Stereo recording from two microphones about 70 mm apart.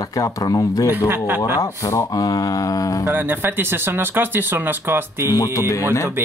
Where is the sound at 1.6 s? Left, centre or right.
Left.